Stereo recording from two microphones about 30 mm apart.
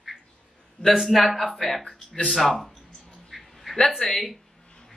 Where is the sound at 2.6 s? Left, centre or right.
Centre.